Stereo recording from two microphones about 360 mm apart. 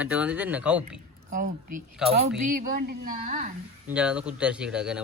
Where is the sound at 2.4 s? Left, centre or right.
Right.